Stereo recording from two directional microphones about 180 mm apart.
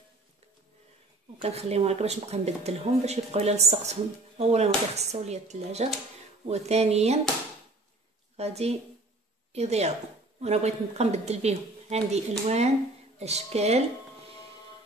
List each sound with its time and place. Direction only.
1.4 s speech: 35° right (ahead or behind)
8.4 s a woman's voice: 35° right (ahead or behind)